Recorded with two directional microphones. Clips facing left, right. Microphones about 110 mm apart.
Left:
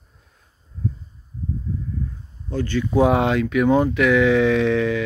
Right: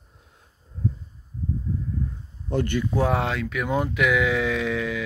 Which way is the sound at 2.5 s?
15° right (ahead or behind).